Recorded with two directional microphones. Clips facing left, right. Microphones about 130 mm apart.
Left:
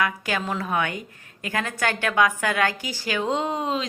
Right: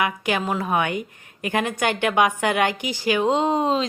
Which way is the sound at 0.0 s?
15° right (ahead or behind).